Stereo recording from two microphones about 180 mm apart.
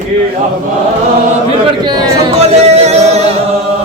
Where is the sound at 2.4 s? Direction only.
35° right (ahead or behind).